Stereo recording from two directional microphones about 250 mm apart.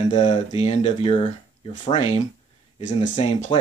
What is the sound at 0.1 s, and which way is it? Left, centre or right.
Speech, left.